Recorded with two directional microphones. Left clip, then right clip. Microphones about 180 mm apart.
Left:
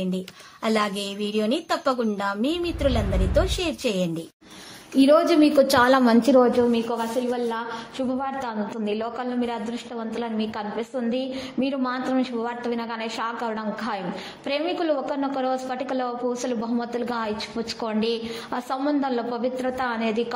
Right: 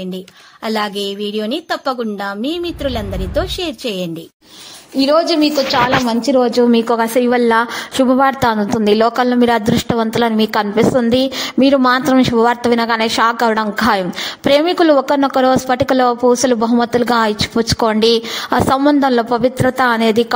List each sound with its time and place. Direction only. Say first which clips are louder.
0.7 s a woman's voice: right 6 dB; 30° right (ahead or behind)
4.9 s a woman's voice: right 4 dB; 20° right (ahead or behind)
5.2 s a woman's voice: right 5 dB; centre (ahead or behind)
6.3 s a woman's voice: right 5 dB; 15° right (ahead or behind)
6.7 s a woman's voice: right 11 dB; 55° right (ahead or behind)